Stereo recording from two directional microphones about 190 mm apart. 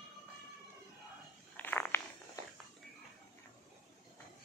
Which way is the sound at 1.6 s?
10° left (ahead or behind).